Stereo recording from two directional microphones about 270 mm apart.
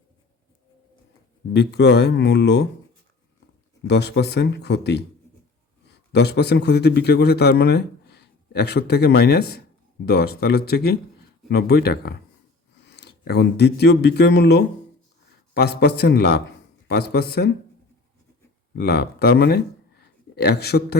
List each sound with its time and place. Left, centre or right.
1.5 s a man's voice: left
3.8 s a man's voice: left
6.1 s a man's voice: left
18.8 s a man's voice: left